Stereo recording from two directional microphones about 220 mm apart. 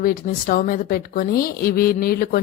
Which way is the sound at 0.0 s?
40° left (ahead or behind).